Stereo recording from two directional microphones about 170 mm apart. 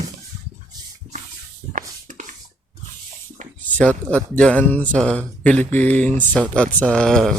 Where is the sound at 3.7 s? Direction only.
10° left (ahead or behind).